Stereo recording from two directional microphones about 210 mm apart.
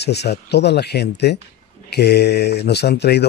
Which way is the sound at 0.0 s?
50° left (ahead or behind).